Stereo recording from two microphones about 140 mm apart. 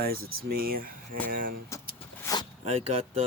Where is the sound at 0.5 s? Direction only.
90° right.